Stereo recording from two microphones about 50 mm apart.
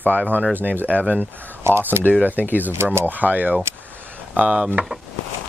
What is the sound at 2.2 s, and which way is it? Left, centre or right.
Speech, right.